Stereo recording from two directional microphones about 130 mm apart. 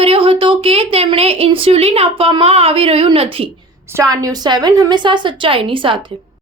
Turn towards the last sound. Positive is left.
turn(degrees=-40)  # may be behind; listen again after turning